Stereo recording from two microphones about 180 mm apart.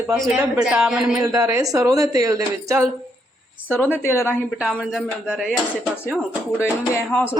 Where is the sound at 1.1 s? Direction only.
20° right (ahead or behind).